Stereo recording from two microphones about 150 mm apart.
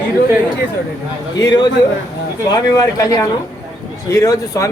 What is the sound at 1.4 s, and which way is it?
Speech, 30° left (ahead or behind).